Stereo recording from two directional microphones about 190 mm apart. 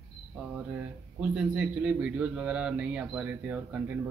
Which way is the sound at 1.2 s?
5° right (ahead or behind).